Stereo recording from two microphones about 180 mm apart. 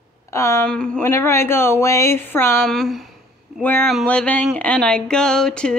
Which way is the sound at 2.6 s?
Centre (ahead or behind).